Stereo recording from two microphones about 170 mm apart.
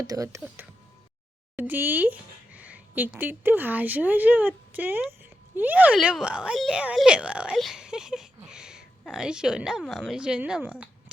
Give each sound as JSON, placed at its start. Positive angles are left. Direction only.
{"t": 0.0, "sound": "a woman's voice", "side_deg": -20}